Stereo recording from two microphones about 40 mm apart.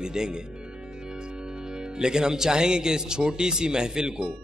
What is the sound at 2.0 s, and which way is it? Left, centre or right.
A man's voice, centre.